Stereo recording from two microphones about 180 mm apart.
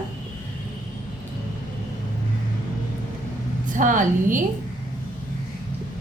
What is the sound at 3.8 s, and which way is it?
Speech, 45° right (ahead or behind).